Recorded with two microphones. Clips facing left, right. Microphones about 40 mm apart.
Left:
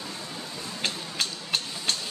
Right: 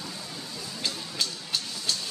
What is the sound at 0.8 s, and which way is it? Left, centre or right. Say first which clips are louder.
Music: left 1 dB; left.